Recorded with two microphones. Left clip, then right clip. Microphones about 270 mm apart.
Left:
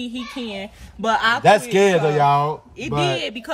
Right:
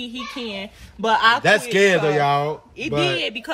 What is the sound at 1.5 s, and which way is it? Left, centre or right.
Speech, left.